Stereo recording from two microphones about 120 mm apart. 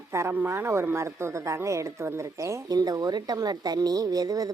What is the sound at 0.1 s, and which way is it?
Speech, 20° right (ahead or behind).